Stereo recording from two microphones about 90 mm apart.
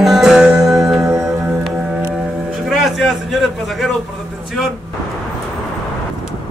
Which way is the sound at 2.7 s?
Centre (ahead or behind).